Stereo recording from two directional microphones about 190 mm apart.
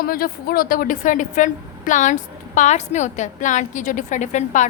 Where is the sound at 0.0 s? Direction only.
50° left (ahead or behind).